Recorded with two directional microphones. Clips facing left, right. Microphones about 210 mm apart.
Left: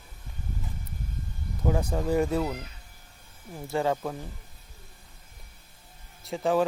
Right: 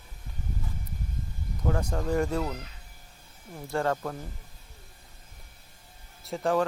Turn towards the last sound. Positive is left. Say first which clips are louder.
# left 1 dB
turn(degrees=0)  # may be behind; listen again after turning